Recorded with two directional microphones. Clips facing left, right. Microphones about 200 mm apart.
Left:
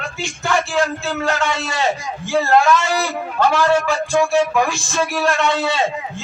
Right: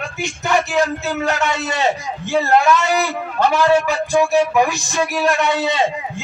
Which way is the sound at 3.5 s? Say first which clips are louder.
Right 2 dB; 20° right (ahead or behind).